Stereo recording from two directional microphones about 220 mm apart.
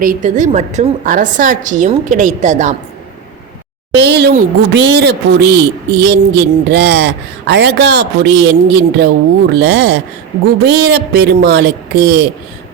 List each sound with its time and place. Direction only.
0.0 s a woman's voice: 35° right (ahead or behind)
3.9 s speech: 50° right (ahead or behind)